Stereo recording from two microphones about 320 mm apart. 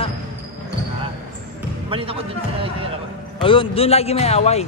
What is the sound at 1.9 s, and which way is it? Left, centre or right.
Speech, centre.